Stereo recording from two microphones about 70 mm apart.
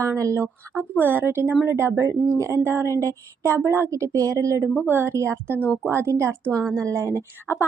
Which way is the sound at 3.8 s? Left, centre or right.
Right.